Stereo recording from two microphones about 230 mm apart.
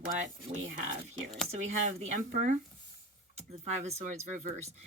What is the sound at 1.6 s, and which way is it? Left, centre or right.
Speech, right.